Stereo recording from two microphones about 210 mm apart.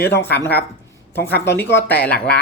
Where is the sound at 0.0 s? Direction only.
10° left (ahead or behind).